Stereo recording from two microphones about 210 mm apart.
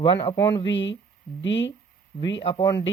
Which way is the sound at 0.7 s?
60° left (ahead or behind).